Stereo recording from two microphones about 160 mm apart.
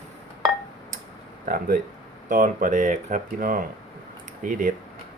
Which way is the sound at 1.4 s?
60° right (ahead or behind).